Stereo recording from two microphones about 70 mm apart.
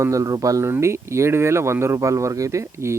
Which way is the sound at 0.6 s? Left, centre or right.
Right.